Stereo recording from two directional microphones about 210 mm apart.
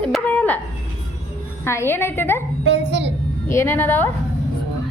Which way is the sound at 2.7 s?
55° right (ahead or behind).